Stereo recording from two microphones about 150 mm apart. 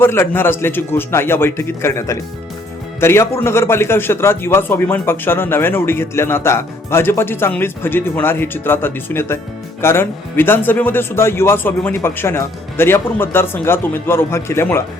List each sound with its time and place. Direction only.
0.0 s a man's voice: 15° left (ahead or behind)